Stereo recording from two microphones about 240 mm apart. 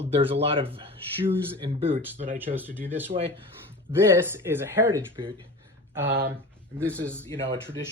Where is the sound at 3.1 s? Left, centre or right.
Right.